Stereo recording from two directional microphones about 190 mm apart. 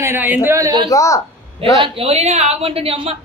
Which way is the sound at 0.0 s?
10° right (ahead or behind).